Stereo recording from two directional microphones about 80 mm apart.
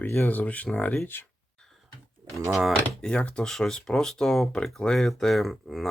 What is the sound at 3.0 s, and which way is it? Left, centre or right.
Speech, centre.